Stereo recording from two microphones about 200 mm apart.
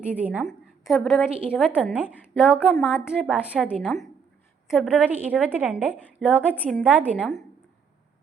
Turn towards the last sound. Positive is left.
turn(degrees=0)  # may be behind; listen again after turning